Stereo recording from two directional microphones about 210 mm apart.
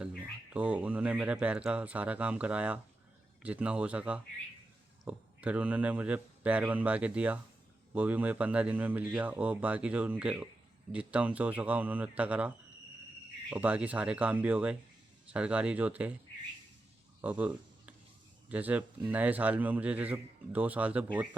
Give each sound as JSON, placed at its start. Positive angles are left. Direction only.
{"t": 0.0, "sound": "speech", "side_deg": -5}
{"t": 17.2, "sound": "a sound", "side_deg": -5}
{"t": 18.4, "sound": "speech", "side_deg": -5}